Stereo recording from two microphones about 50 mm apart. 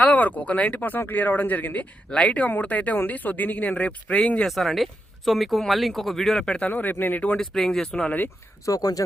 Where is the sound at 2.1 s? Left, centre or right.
Left.